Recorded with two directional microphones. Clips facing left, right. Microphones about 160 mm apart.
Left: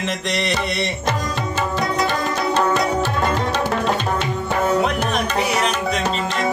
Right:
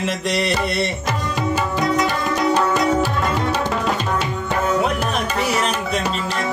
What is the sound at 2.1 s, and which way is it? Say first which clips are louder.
Tabla: right 2 dB; 10° right (ahead or behind).